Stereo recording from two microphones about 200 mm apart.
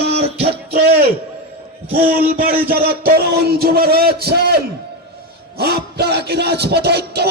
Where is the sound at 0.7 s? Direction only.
50° right (ahead or behind).